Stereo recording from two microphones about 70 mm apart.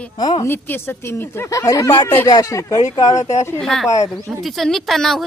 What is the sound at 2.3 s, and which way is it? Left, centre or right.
Speech, left.